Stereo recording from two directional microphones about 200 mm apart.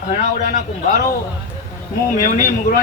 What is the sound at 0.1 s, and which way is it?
Speech, 35° left (ahead or behind).